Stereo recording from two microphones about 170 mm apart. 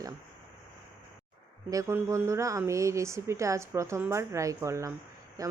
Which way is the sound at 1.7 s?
20° right (ahead or behind).